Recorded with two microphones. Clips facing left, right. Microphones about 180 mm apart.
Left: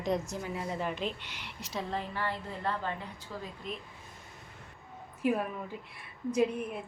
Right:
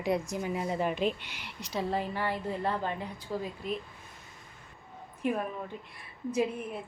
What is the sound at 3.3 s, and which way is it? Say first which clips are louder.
Speech: right 7 dB; 30° right (ahead or behind).